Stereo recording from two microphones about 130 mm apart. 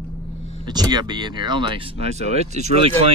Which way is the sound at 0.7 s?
30° right (ahead or behind).